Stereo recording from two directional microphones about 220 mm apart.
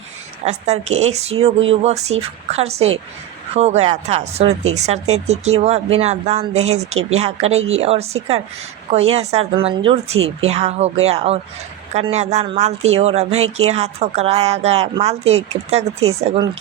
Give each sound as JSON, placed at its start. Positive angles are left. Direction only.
{"t": 0.4, "sound": "speech", "side_deg": -30}